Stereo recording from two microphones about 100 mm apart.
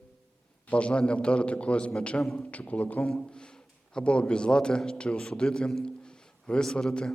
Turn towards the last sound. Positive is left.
turn(degrees=10)  # may be behind; listen again after turning